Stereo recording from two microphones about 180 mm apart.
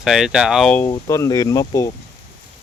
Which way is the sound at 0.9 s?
20° left (ahead or behind).